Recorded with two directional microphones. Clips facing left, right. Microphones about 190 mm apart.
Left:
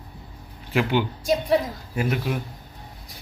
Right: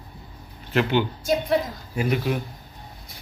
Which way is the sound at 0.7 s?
10° left (ahead or behind).